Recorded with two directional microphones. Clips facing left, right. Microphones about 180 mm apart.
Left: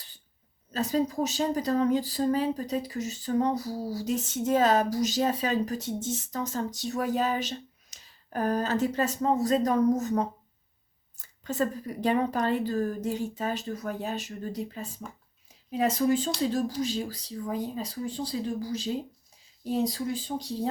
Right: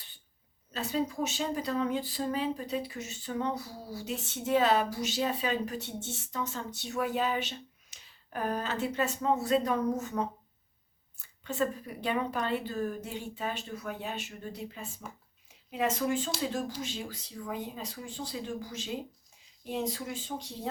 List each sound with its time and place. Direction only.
0.7 s speech: 40° left (ahead or behind)